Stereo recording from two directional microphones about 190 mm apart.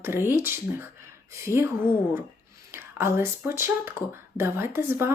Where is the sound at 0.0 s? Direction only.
10° right (ahead or behind).